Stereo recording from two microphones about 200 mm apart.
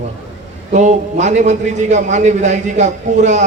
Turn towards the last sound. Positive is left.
turn(degrees=-35)  # may be behind; listen again after turning